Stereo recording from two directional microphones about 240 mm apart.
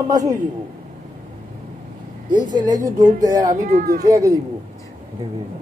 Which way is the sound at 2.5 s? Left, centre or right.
Centre.